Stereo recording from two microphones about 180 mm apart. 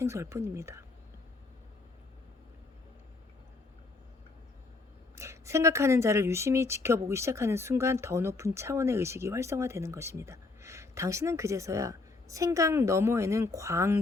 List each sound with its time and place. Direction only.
0.0 s speech: 15° right (ahead or behind)
5.1 s speech: 15° right (ahead or behind)